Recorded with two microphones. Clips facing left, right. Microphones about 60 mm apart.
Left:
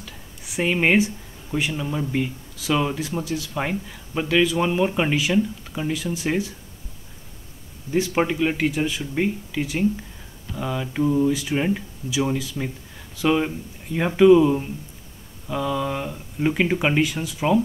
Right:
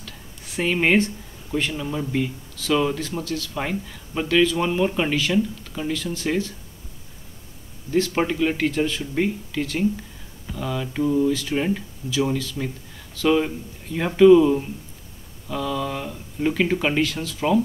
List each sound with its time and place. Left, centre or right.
0.0 s speech: centre
7.9 s speech: centre